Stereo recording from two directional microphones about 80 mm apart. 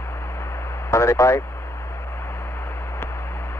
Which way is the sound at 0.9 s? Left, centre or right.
Left.